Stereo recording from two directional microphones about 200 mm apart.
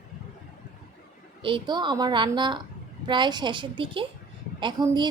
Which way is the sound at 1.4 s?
25° right (ahead or behind).